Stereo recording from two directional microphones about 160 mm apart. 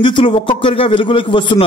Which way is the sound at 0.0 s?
30° left (ahead or behind).